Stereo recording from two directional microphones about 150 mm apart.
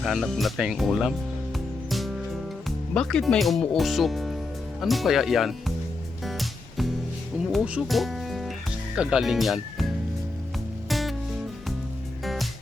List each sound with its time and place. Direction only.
0.0 s speech: centre (ahead or behind)
1.5 s music: centre (ahead or behind)
2.6 s speech: 5° left (ahead or behind)
6.2 s music: centre (ahead or behind)
7.5 s speech: 5° right (ahead or behind)
10.8 s music: centre (ahead or behind)
12.2 s music: centre (ahead or behind)